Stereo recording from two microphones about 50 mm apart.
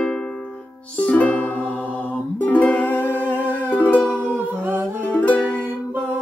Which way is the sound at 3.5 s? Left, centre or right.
Left.